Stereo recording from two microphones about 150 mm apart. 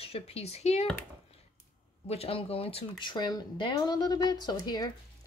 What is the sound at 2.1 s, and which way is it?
Speech, 40° left (ahead or behind).